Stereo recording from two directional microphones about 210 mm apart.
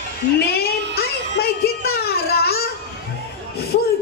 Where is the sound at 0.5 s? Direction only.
50° left (ahead or behind).